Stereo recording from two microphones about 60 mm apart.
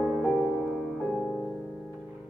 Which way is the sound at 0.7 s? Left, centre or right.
Centre.